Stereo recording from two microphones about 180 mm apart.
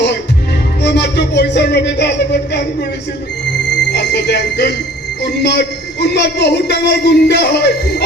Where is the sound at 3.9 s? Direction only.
70° left (ahead or behind).